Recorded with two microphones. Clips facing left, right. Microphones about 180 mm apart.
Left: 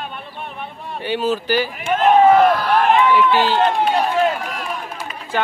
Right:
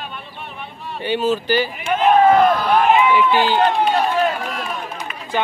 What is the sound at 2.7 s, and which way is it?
Run, 5° right (ahead or behind).